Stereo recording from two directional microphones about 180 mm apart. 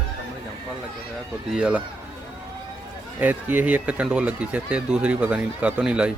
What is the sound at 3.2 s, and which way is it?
Speech, 10° right (ahead or behind).